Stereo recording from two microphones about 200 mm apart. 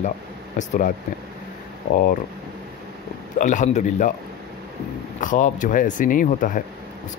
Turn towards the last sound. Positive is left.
turn(degrees=40)  # may be behind; listen again after turning